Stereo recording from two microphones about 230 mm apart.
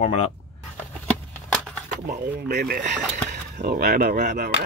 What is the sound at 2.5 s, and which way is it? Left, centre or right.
Speech, right.